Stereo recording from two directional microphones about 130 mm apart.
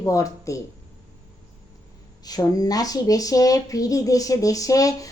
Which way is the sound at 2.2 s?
30° left (ahead or behind).